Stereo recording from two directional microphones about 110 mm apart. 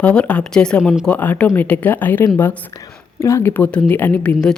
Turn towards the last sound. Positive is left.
turn(degrees=10)  # may be behind; listen again after turning